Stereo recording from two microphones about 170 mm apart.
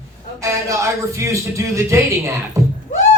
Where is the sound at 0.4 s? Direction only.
20° right (ahead or behind).